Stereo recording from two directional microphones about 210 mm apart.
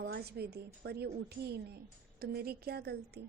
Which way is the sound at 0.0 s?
50° right (ahead or behind).